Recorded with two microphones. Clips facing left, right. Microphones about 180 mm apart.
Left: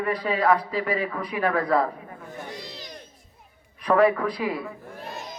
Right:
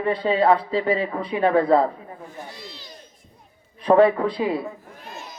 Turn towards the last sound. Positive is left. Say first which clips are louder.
# right 4 dB
turn(degrees=-25)  # may be behind; listen again after turning